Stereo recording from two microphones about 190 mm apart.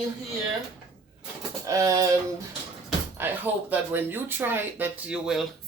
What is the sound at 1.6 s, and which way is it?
Speech, 15° right (ahead or behind).